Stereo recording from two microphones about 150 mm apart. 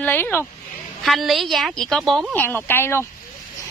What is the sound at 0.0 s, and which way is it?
Speech, 10° left (ahead or behind).